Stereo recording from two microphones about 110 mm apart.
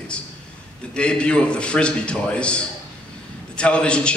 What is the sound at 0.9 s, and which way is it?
A man's voice, 10° left (ahead or behind).